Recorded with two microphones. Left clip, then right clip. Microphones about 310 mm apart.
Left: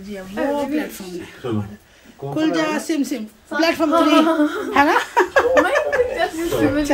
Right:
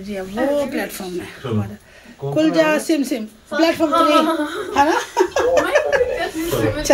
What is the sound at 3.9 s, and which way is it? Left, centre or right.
Speech, left.